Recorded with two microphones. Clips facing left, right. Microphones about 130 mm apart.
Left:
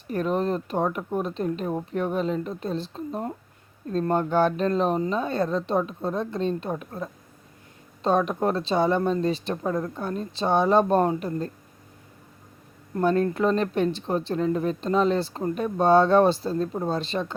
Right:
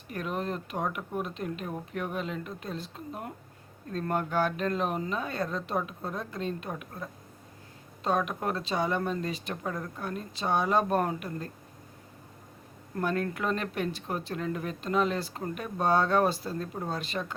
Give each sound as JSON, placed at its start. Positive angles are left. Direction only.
{"t": 0.1, "sound": "speech", "side_deg": 35}
{"t": 13.0, "sound": "speech", "side_deg": 30}